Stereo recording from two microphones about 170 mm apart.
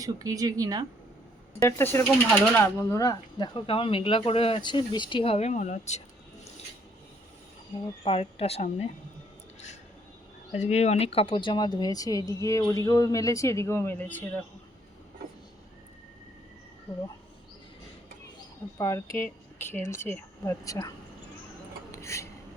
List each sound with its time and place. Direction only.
0.0 s speech: 20° right (ahead or behind)
1.6 s speech: 15° left (ahead or behind); by 6.0 s 45° left (ahead or behind)
8.0 s speech: 35° left (ahead or behind)
10.5 s a woman's voice: 40° left (ahead or behind); by 14.4 s 10° left (ahead or behind)
18.8 s a woman's voice: 15° left (ahead or behind)
21.9 s speech: 15° left (ahead or behind)